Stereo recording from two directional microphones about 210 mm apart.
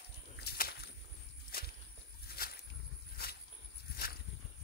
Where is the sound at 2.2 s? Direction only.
45° left (ahead or behind).